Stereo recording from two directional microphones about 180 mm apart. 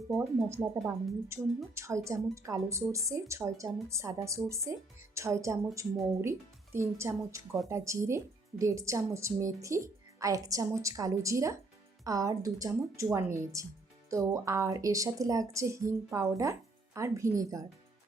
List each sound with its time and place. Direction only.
0.2 s speech: 15° right (ahead or behind)